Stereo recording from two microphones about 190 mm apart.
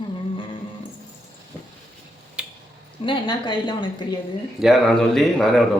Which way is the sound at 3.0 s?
25° left (ahead or behind).